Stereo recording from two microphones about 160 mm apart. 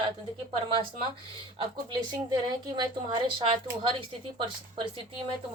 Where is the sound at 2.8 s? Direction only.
30° right (ahead or behind).